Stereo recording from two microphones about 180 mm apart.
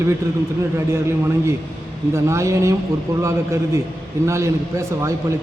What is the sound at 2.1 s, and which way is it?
A man's voice, 15° right (ahead or behind).